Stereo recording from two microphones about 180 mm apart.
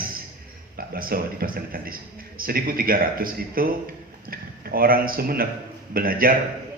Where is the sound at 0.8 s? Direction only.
55° right (ahead or behind).